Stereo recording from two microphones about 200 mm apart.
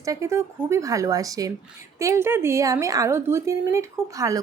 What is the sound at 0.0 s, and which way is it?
Speech, 15° right (ahead or behind).